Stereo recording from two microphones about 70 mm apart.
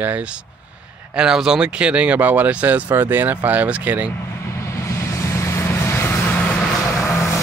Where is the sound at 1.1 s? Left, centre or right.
Centre.